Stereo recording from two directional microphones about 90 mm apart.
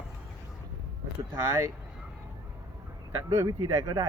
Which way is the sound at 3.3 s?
30° right (ahead or behind).